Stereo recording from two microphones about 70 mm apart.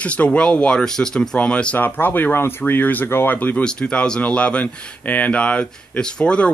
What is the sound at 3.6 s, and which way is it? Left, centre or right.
Speech, centre.